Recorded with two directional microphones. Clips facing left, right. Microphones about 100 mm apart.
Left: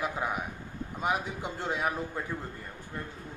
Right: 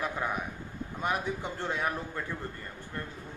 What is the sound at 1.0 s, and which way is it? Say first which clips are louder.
A man's voice: even; 15° left (ahead or behind).